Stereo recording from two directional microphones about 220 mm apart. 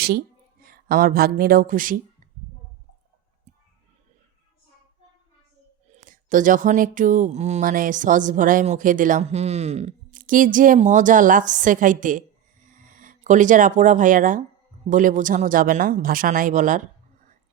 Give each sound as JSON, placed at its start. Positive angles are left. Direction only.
{"t": 0.6, "sound": "speech", "side_deg": -45}
{"t": 5.9, "sound": "speech", "side_deg": -35}